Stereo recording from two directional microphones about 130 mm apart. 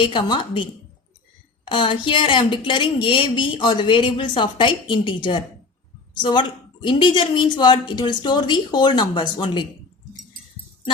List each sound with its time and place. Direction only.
0.0 s a woman's voice: 35° left (ahead or behind)